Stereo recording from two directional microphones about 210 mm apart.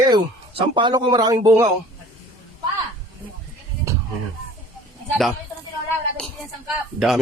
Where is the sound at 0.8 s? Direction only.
20° right (ahead or behind).